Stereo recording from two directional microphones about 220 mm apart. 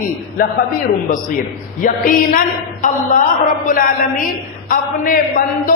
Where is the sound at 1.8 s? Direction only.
40° left (ahead or behind).